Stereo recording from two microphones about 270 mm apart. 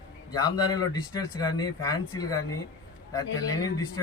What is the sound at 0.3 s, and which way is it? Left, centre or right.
Speech, centre.